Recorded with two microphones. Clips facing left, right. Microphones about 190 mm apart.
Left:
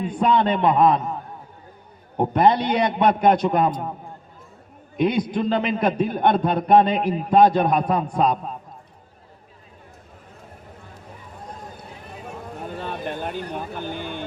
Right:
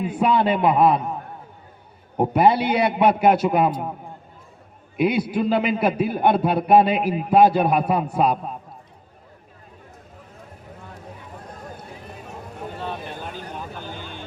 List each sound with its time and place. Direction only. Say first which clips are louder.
0.0 s a man's voice: even; 5° right (ahead or behind)
2.1 s a man's voice: right 1 dB; 5° right (ahead or behind)
4.9 s a man's voice: even; 5° right (ahead or behind)
12.8 s vehicle: left 4 dB; 55° left (ahead or behind)